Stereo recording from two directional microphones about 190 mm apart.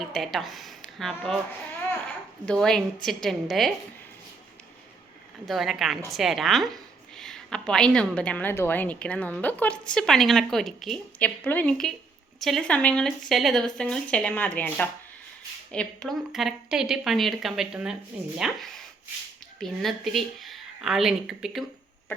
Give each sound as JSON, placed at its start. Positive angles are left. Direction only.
{"t": 0.1, "sound": "a woman's voice", "side_deg": 0}
{"t": 2.5, "sound": "a woman's voice", "side_deg": 0}
{"t": 5.5, "sound": "a woman's voice", "side_deg": 0}